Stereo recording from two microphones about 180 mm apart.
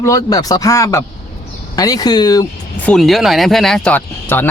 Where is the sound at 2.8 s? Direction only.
Centre (ahead or behind).